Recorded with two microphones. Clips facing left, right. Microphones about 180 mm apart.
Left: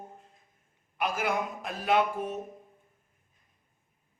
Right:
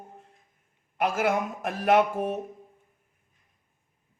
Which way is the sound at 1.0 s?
75° right (ahead or behind).